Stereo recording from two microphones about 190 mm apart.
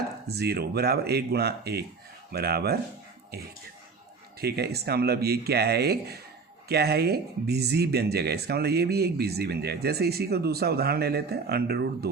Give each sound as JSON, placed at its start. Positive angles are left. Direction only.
{"t": 0.3, "sound": "speech", "side_deg": -55}
{"t": 4.4, "sound": "speech", "side_deg": -55}